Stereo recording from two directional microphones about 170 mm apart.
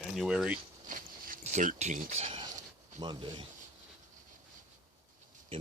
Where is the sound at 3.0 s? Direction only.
25° right (ahead or behind).